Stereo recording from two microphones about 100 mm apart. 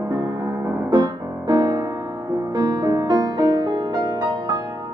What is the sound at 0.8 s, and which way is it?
Music, 45° right (ahead or behind).